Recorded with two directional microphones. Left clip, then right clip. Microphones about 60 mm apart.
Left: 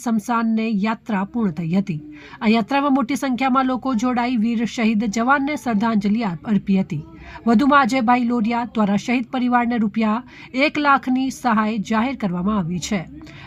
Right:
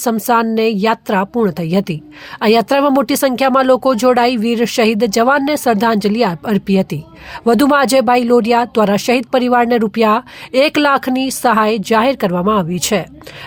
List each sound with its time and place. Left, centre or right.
0.0 s speech: right
2.4 s speech: right